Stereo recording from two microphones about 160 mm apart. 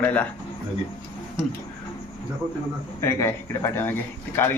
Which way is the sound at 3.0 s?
15° left (ahead or behind).